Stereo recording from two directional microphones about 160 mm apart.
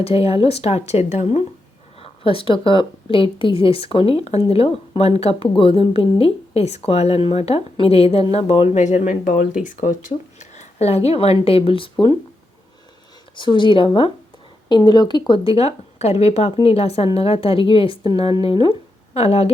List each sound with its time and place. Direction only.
0.0 s a woman's voice: 35° left (ahead or behind)
2.0 s a woman's voice: 35° left (ahead or behind)
13.3 s a woman's voice: 30° left (ahead or behind)